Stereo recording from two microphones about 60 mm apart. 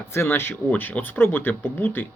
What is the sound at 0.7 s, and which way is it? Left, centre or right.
Speech, left.